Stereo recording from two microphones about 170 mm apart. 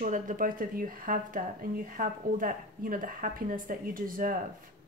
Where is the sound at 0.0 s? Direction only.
50° right (ahead or behind).